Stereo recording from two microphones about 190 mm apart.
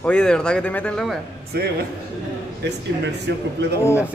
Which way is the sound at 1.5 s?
55° right (ahead or behind).